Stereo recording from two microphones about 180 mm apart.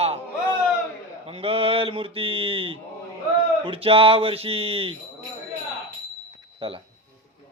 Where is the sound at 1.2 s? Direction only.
30° right (ahead or behind).